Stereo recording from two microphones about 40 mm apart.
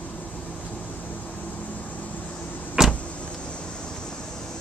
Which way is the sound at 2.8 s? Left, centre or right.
Centre.